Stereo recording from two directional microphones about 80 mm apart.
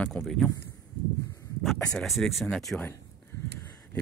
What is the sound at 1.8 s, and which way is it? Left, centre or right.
Speech, centre.